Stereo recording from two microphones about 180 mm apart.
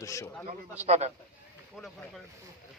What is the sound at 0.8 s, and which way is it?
Speech, 35° right (ahead or behind).